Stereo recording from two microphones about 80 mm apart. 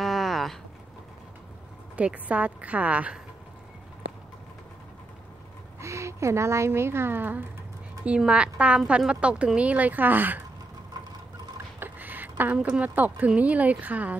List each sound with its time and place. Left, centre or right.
0.0 s a sound: centre
2.0 s a woman's voice: centre
5.8 s a woman's voice: right
8.3 s a woman's voice: centre
11.8 s a sound: right
12.5 s speech: centre